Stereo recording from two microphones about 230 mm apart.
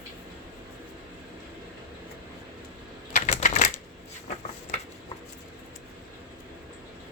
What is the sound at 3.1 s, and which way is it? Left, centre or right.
Typewriter, left.